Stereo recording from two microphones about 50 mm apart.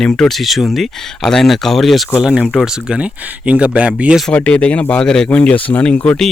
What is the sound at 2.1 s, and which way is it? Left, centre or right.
Speech, centre.